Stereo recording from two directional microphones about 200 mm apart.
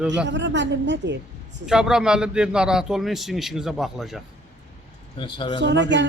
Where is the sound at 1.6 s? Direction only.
5° right (ahead or behind).